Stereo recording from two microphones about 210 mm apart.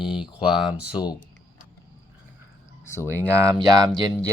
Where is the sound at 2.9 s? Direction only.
10° left (ahead or behind).